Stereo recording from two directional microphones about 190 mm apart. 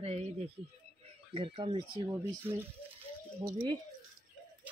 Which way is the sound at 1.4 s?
30° right (ahead or behind).